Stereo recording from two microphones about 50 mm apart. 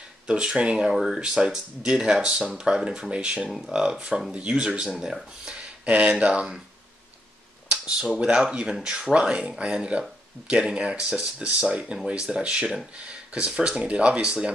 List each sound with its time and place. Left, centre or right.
0.6 s speech: right
0.9 s speech: centre
3.4 s speech: centre
3.7 s speech: centre
8.0 s speech: centre
9.1 s speech: centre